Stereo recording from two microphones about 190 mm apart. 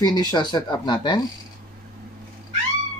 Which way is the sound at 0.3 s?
20° left (ahead or behind).